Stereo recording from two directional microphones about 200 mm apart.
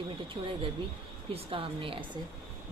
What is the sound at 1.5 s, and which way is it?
Speech, 25° right (ahead or behind).